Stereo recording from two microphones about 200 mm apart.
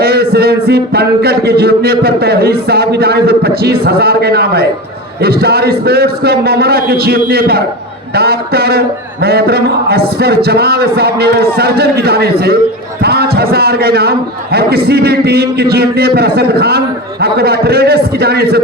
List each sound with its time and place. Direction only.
0.0 s music: 50° right (ahead or behind)
0.3 s a man's voice: 50° right (ahead or behind)